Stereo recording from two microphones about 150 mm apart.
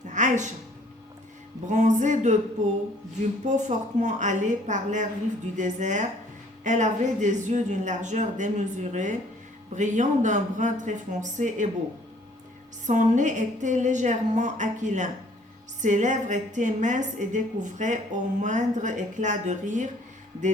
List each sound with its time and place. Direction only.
0.0 s a sound: 55° right (ahead or behind)
1.6 s speech: 55° right (ahead or behind)
3.4 s a woman's voice: 55° right (ahead or behind)
12.9 s a woman's voice: 55° right (ahead or behind)